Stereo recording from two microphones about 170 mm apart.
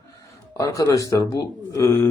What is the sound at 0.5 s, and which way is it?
A man's voice, 20° left (ahead or behind).